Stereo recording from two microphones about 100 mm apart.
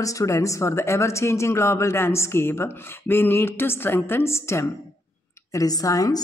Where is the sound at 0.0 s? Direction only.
35° left (ahead or behind).